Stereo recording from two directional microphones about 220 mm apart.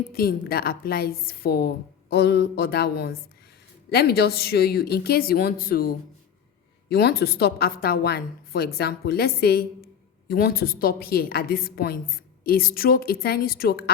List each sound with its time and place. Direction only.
0.1 s a woman's voice: 45° left (ahead or behind)